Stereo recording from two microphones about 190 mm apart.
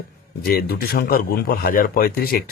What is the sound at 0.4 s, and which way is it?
A man's voice, 55° left (ahead or behind).